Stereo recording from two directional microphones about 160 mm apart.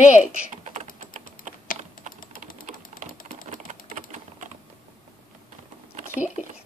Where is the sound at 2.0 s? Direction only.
60° left (ahead or behind).